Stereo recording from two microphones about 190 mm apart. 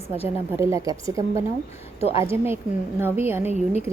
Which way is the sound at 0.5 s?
15° right (ahead or behind).